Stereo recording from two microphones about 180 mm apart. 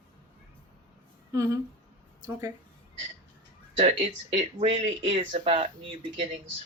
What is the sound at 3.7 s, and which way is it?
Speech, 35° right (ahead or behind).